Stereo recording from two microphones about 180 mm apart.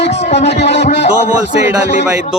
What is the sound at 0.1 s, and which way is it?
Music, 35° left (ahead or behind).